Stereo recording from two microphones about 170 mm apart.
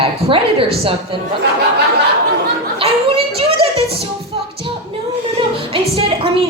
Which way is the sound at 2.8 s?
35° right (ahead or behind).